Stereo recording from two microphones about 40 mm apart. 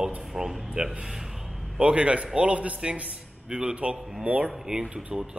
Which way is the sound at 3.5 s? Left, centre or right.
Centre.